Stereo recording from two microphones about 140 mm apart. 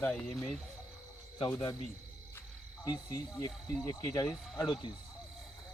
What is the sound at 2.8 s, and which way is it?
Speech, 30° left (ahead or behind).